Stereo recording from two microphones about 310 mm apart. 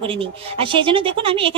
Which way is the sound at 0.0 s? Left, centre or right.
Centre.